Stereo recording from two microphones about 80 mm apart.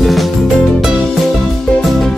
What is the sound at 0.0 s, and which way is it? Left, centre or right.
Music, centre.